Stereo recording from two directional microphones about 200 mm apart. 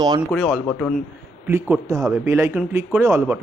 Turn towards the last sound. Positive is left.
turn(degrees=-15)  # may be behind; listen again after turning